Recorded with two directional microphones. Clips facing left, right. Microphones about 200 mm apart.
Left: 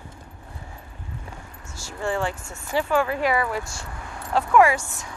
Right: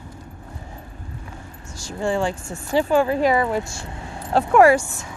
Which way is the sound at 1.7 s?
15° right (ahead or behind).